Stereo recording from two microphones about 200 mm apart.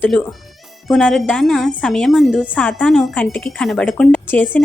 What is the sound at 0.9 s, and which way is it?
A woman's voice, 5° left (ahead or behind).